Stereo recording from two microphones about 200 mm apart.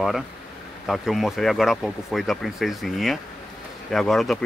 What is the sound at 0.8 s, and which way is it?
Speech, centre (ahead or behind).